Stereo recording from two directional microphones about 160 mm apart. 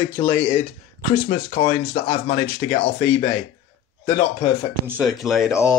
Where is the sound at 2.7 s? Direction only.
40° left (ahead or behind).